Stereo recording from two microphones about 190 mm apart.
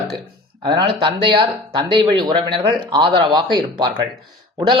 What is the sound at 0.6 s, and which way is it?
Speech, 25° right (ahead or behind).